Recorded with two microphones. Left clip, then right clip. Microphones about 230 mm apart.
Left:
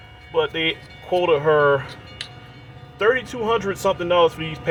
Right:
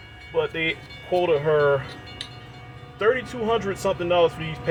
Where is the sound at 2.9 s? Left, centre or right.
Left.